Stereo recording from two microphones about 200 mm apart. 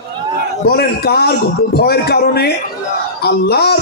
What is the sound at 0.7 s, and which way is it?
A man's voice, 50° left (ahead or behind).